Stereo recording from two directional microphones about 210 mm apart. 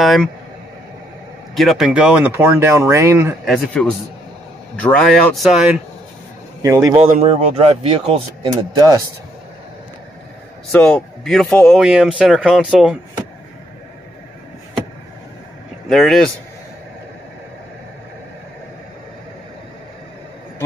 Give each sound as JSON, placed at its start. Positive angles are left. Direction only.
{"t": 0.0, "sound": "speech", "side_deg": 0}
{"t": 1.5, "sound": "speech", "side_deg": 0}
{"t": 3.4, "sound": "speech", "side_deg": 0}
{"t": 6.6, "sound": "speech", "side_deg": -15}
{"t": 7.0, "sound": "speech", "side_deg": -30}
{"t": 8.7, "sound": "speech", "side_deg": -20}
{"t": 10.7, "sound": "speech", "side_deg": 5}
{"t": 15.9, "sound": "speech", "side_deg": 0}